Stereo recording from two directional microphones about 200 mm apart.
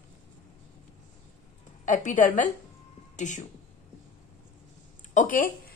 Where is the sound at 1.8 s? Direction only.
40° left (ahead or behind).